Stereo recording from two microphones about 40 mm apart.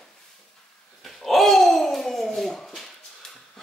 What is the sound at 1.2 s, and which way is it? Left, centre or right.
A child's voice, centre.